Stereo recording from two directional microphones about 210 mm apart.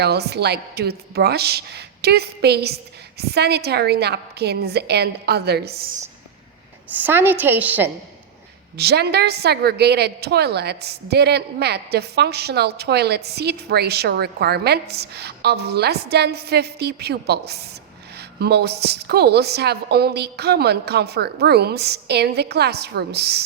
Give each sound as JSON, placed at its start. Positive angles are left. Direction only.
{"t": 0.0, "sound": "a woman's voice", "side_deg": -50}
{"t": 6.9, "sound": "a woman's voice", "side_deg": -10}
{"t": 8.8, "sound": "a woman's voice", "side_deg": -50}